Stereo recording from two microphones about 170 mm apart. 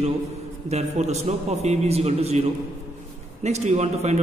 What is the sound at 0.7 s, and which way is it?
A man's voice, 40° right (ahead or behind).